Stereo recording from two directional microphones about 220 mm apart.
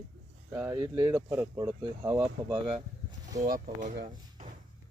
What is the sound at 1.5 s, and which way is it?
Speech, 15° right (ahead or behind).